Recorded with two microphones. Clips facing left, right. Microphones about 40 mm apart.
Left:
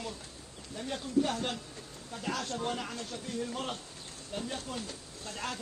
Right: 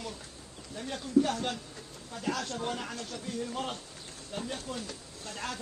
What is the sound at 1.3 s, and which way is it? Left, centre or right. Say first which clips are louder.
Speech: right 1 dB; left.